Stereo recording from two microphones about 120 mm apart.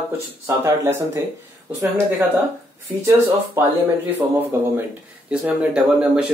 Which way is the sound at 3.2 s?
15° right (ahead or behind).